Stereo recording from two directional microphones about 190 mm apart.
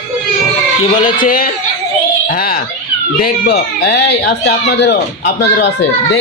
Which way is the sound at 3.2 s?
55° left (ahead or behind).